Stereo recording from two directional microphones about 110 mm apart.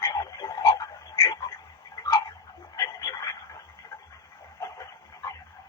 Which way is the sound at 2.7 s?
35° left (ahead or behind).